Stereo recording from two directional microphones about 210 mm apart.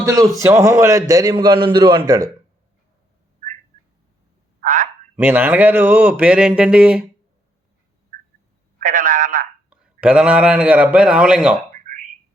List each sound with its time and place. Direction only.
0.3 s a man's voice: 15° right (ahead or behind)
4.6 s frog: 40° right (ahead or behind)
5.1 s a man's voice: 10° right (ahead or behind)
8.8 s telephone: 40° right (ahead or behind)
9.6 s a man's voice: 5° right (ahead or behind)
11.7 s a sound: 35° right (ahead or behind)